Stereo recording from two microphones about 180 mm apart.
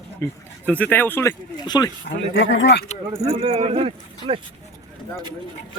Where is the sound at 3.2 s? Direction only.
35° right (ahead or behind).